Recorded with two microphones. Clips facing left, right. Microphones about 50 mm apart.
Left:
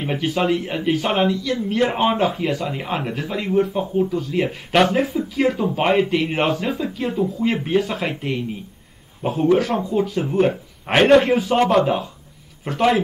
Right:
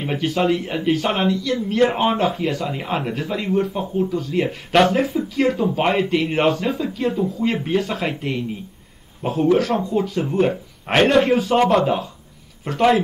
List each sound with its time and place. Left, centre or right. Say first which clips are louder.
0.0 s a man's voice: right 1 dB; centre